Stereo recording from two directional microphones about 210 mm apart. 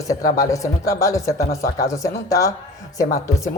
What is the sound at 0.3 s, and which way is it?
Speech, 15° left (ahead or behind).